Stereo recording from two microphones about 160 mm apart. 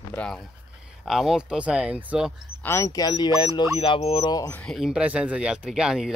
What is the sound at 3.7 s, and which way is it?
Speech, 35° left (ahead or behind).